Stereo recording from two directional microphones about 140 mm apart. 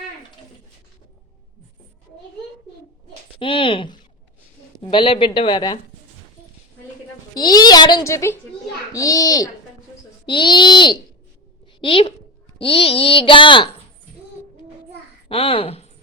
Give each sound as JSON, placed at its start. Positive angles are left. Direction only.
{"t": 3.3, "sound": "a child's voice", "side_deg": 40}
{"t": 7.3, "sound": "a child's voice", "side_deg": 30}
{"t": 15.3, "sound": "a woman's voice", "side_deg": 40}